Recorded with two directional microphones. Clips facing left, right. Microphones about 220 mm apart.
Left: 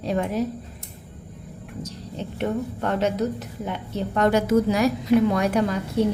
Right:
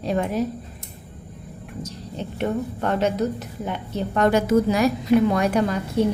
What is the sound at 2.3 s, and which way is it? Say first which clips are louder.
A woman's voice: right 1 dB; 45° right (ahead or behind).